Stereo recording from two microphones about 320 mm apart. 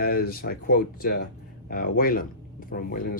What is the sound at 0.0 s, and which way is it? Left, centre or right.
Speech, left.